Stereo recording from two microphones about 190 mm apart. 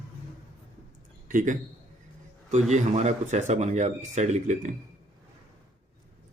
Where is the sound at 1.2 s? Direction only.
45° right (ahead or behind).